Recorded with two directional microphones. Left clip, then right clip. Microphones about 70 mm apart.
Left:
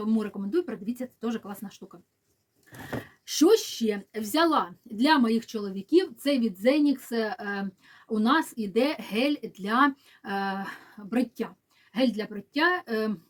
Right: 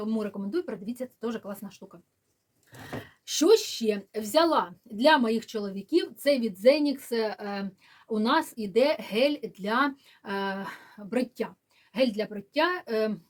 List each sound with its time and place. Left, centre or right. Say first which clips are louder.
0.0 s a woman's voice: left 2 dB; right
3.0 s a woman's voice: left 3 dB; right